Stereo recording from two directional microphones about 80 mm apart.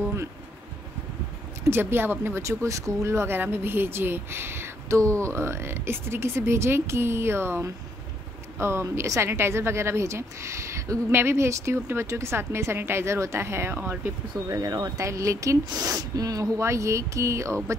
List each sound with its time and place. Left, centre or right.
1.6 s speech: right
14.5 s speech: right
15.0 s speech: right